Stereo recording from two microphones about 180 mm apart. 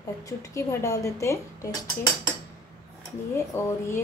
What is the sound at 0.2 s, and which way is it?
A woman's voice, 15° left (ahead or behind).